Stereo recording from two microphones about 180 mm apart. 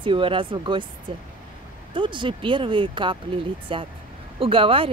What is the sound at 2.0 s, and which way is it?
Speech, 25° right (ahead or behind).